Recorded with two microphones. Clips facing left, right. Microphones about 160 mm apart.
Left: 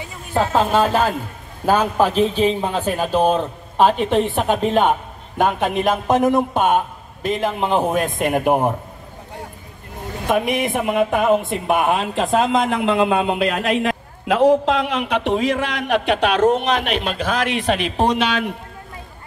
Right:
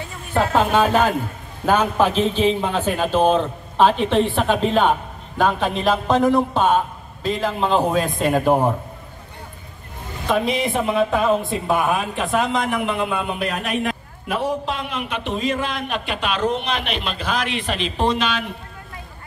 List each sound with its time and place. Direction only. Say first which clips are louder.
0.0 s a woman's voice: left 1 dB; 10° left (ahead or behind)
10.2 s speech: left 1 dB; 15° left (ahead or behind)
12.8 s a man's voice: left 6 dB; 90° left; by 18.5 s 60° left (ahead or behind)